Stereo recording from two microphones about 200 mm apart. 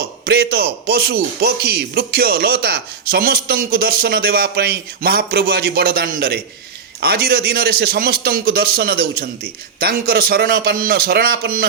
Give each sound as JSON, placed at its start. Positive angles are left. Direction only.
{"t": 0.3, "sound": "a man's voice", "side_deg": -55}